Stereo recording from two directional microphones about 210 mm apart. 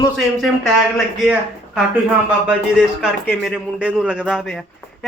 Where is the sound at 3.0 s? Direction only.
Centre (ahead or behind).